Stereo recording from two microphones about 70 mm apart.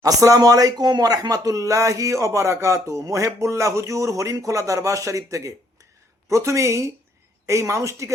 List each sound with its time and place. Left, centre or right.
0.0 s speech: right